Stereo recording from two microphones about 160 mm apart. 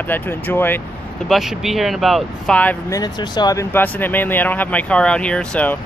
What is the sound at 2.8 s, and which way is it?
Speech, 25° left (ahead or behind).